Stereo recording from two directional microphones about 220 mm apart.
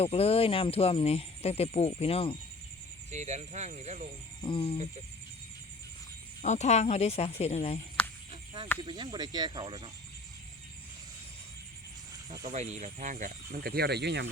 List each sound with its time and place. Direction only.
0.0 s speech: 25° left (ahead or behind)
3.1 s speech: 30° right (ahead or behind)
4.4 s speech: 20° left (ahead or behind)
6.4 s speech: 30° left (ahead or behind)
8.3 s cricket: 20° right (ahead or behind)
8.8 s speech: 20° right (ahead or behind)
12.4 s speech: 30° right (ahead or behind); by 14.3 s 50° right (ahead or behind)